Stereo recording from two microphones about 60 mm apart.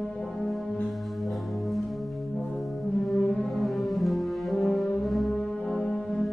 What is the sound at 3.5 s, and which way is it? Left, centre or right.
Brass instrument, centre.